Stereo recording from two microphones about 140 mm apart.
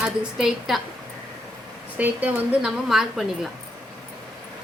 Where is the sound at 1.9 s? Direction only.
10° right (ahead or behind).